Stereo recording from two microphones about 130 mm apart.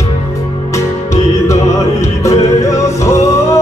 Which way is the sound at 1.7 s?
25° left (ahead or behind).